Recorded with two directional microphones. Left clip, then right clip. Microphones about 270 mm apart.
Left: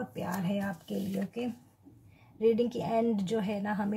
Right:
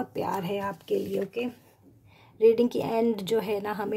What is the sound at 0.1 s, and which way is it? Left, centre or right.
Speech, right.